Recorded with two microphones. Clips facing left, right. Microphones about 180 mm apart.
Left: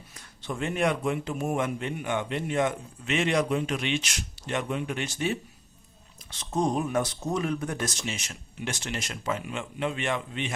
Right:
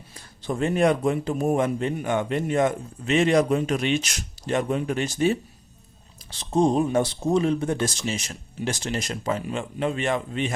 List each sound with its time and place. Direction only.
0.2 s a man's voice: 35° right (ahead or behind)